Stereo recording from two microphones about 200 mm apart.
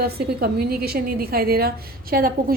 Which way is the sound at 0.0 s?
50° right (ahead or behind).